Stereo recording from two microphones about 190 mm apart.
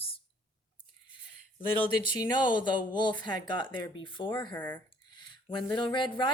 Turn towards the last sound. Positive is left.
turn(degrees=25)  # may be behind; listen again after turning